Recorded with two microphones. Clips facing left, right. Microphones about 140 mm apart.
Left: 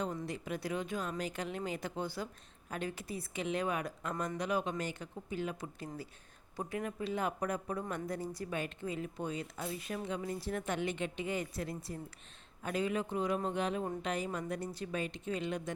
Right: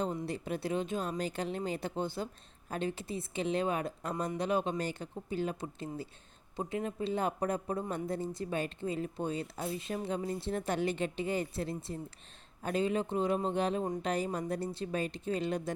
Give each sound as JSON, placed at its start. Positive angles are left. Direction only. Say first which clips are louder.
{"t": 0.0, "sound": "a woman's voice", "louder": "right 3 dB", "side_deg": -30}